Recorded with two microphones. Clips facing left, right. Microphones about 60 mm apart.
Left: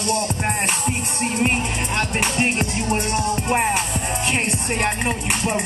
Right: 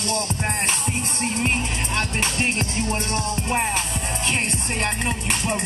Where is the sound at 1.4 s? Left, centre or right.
Centre.